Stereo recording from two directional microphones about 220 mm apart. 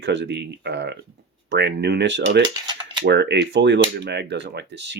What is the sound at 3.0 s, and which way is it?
Speech, 50° right (ahead or behind).